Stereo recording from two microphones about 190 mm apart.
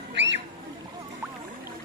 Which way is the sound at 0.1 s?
70° right (ahead or behind).